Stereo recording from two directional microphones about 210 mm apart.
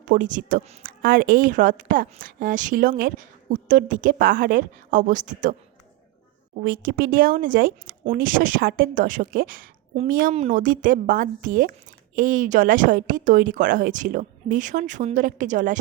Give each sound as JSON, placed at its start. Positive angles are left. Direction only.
{"t": 0.0, "sound": "a woman's voice", "side_deg": -40}
{"t": 6.7, "sound": "a woman's voice", "side_deg": -45}